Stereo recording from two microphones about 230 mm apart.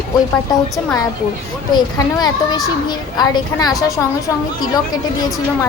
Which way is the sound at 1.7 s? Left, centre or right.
Centre.